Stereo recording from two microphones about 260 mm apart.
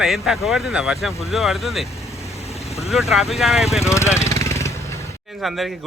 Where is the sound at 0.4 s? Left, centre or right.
Centre.